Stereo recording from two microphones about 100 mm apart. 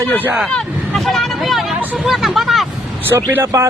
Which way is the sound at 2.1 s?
Centre (ahead or behind).